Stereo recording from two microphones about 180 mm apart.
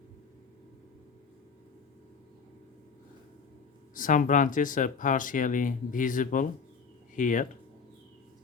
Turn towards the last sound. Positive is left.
turn(degrees=45)  # may be behind; listen again after turning